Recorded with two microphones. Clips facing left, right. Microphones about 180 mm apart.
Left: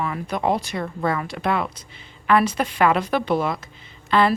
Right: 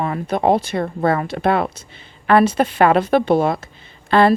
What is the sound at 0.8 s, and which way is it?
Speech, 60° right (ahead or behind).